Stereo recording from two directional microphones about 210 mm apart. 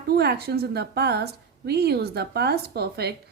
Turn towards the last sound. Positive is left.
turn(degrees=-50)  # may be behind; listen again after turning